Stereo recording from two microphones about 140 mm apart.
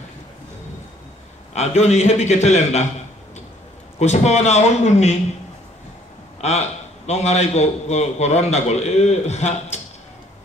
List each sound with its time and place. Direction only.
1.5 s a man's voice: 50° left (ahead or behind)
4.0 s a man's voice: 50° left (ahead or behind)
6.4 s a man's voice: 50° left (ahead or behind)